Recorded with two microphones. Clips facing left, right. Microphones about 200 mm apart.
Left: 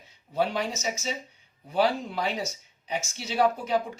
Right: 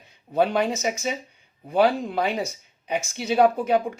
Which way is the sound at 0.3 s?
55° right (ahead or behind).